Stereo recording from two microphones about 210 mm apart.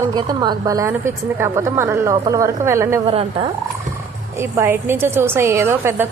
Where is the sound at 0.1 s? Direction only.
20° right (ahead or behind).